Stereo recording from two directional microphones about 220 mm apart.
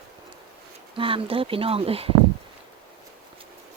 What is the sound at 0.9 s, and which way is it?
Speech, 25° right (ahead or behind).